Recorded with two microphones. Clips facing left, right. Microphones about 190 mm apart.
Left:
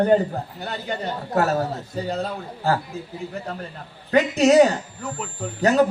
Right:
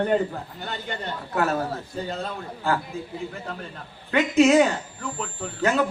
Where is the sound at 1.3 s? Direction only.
40° left (ahead or behind).